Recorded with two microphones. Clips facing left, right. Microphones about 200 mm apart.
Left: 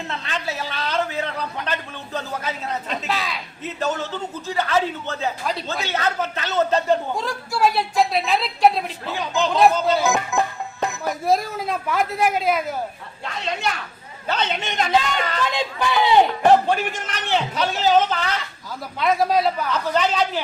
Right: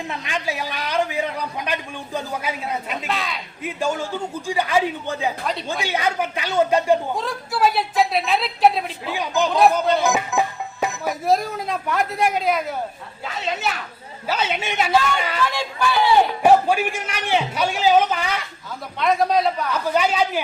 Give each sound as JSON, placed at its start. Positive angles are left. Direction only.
{"t": 0.1, "sound": "a man's voice", "side_deg": -15}
{"t": 3.1, "sound": "speech", "side_deg": 0}
{"t": 3.6, "sound": "a man's voice", "side_deg": -10}
{"t": 7.2, "sound": "a man's voice", "side_deg": 0}
{"t": 15.4, "sound": "a man's voice", "side_deg": 20}
{"t": 16.4, "sound": "a man's voice", "side_deg": -10}
{"t": 18.9, "sound": "speech", "side_deg": 0}
{"t": 19.7, "sound": "a man's voice", "side_deg": -10}